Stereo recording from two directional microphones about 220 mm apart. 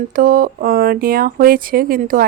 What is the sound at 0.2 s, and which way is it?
Speech, 40° right (ahead or behind).